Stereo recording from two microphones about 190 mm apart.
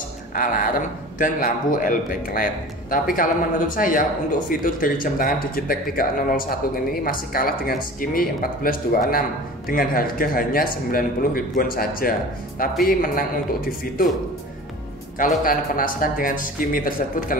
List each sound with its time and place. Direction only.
0.3 s speech: 45° left (ahead or behind)
15.1 s speech: 45° left (ahead or behind)